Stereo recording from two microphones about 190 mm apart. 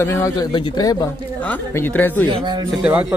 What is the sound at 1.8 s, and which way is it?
Speech, 10° left (ahead or behind).